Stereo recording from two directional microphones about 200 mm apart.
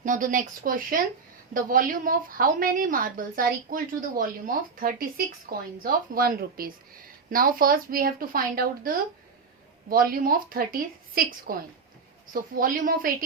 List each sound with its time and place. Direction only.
0.0 s a woman's voice: 40° right (ahead or behind)